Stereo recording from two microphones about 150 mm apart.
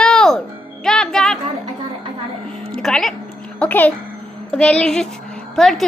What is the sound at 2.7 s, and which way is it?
Music, 5° left (ahead or behind).